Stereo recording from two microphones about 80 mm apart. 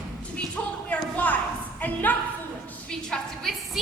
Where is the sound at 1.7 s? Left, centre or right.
Left.